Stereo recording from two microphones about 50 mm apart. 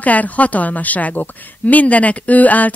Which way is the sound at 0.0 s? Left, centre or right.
Left.